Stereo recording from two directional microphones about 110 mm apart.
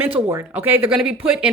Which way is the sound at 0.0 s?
25° right (ahead or behind).